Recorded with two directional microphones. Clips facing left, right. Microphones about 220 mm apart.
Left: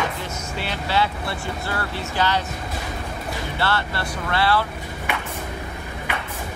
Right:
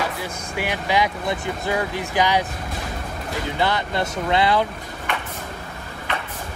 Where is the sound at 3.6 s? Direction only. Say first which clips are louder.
Right 3 dB; 15° right (ahead or behind).